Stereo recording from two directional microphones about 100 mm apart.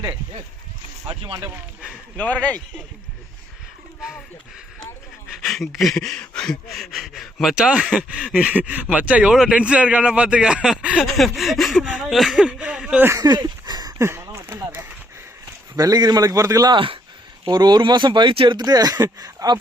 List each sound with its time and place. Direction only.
1.0 s speech: 70° right (ahead or behind)
2.1 s speech: 15° left (ahead or behind)
5.3 s a man's voice: centre (ahead or behind)
13.1 s a sound: 40° right (ahead or behind)
14.0 s a sound: 25° right (ahead or behind)
15.7 s a man's voice: 40° right (ahead or behind)
16.7 s speech: 60° right (ahead or behind)
17.5 s speech: 45° right (ahead or behind)
18.6 s a man's voice: 40° right (ahead or behind)